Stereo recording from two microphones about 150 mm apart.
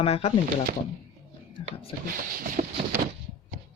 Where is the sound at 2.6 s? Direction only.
60° right (ahead or behind).